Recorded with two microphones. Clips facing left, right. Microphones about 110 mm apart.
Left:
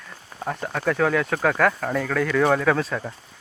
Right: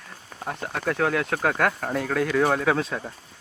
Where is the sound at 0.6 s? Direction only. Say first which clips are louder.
Left 2 dB; 10° right (ahead or behind).